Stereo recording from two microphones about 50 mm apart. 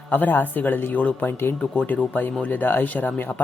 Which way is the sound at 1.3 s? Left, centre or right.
Left.